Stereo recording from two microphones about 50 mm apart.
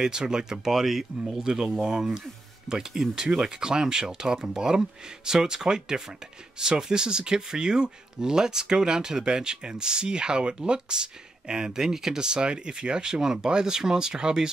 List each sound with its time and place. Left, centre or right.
0.0 s speech: centre